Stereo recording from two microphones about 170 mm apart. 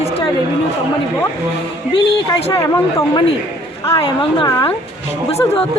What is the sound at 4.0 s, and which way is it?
Speech, 30° left (ahead or behind).